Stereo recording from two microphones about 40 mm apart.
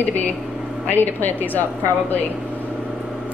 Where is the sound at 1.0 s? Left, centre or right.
Left.